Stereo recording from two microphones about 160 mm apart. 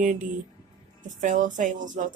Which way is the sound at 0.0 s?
55° right (ahead or behind).